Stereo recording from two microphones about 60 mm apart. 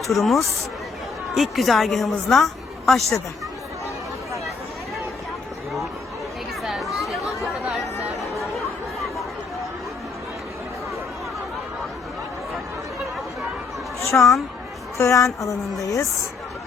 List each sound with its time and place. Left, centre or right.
0.1 s a woman's voice: centre
6.6 s chatter: centre
8.5 s chatter: centre
14.2 s a woman's voice: centre
14.9 s speech: left